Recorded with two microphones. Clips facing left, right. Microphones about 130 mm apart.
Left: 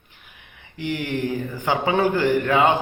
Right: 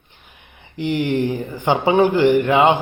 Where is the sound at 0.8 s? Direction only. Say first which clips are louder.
Right 6 dB; 25° right (ahead or behind).